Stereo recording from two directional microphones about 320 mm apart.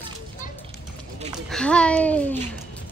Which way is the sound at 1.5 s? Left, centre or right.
Centre.